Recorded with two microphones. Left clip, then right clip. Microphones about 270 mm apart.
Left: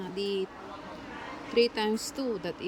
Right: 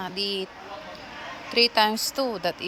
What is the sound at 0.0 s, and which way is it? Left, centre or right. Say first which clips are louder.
Speech: right 3 dB; centre.